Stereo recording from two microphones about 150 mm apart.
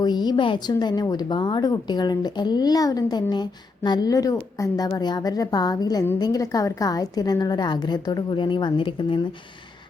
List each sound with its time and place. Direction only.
0.0 s a woman's voice: 30° left (ahead or behind)